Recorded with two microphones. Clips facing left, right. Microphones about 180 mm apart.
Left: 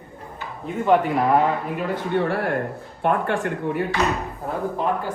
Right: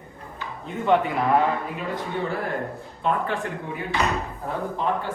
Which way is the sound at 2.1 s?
65° left (ahead or behind).